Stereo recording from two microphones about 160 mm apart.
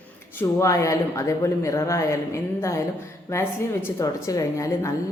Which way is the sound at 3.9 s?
20° left (ahead or behind).